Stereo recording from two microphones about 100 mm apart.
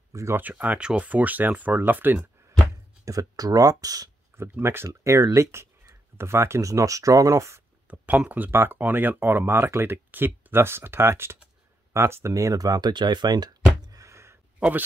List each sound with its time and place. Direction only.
0.1 s speech: 30° right (ahead or behind)
0.4 s speech: 15° right (ahead or behind)
2.7 s speech: 35° right (ahead or behind)
4.4 s speech: 25° right (ahead or behind)
7.9 s speech: 15° right (ahead or behind); by 13.6 s 45° right (ahead or behind)
13.7 s a sound: 35° right (ahead or behind)
14.6 s speech: 20° right (ahead or behind)